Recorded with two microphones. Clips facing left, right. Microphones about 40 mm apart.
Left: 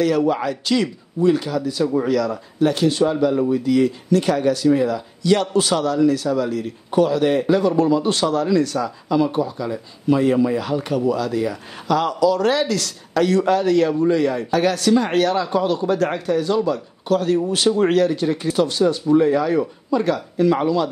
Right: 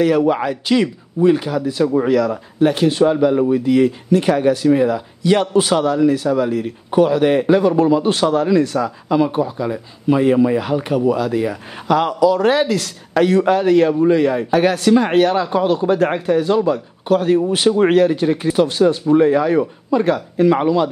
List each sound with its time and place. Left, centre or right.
0.0 s a man's voice: right